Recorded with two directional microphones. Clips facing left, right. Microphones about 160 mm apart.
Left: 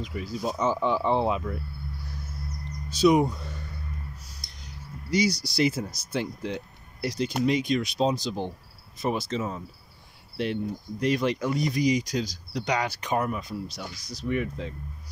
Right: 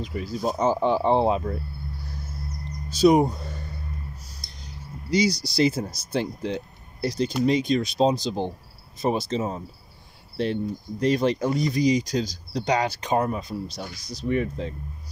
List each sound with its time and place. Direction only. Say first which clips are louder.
0.0 s speech: right 3 dB; 35° right (ahead or behind)
2.9 s speech: right 3 dB; 40° right (ahead or behind)
4.4 s a sound: right 3 dB; 30° right (ahead or behind)
5.6 s speech: right 3 dB; 30° right (ahead or behind)